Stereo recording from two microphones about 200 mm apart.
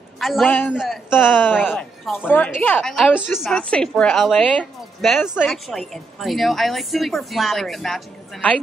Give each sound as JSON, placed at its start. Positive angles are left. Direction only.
{"t": 0.2, "sound": "a woman's voice", "side_deg": 0}